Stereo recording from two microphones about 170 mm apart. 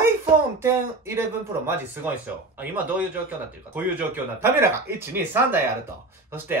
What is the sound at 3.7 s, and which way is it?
Speech, 10° right (ahead or behind).